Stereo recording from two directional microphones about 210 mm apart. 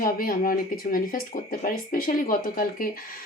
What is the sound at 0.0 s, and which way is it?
Speech, 40° left (ahead or behind).